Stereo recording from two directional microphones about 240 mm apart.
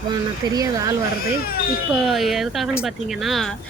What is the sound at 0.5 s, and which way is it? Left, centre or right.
Speech, centre.